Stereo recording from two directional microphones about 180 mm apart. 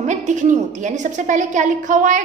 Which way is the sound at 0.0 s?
40° right (ahead or behind).